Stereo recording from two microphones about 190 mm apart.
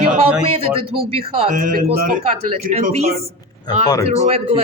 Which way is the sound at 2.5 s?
40° right (ahead or behind).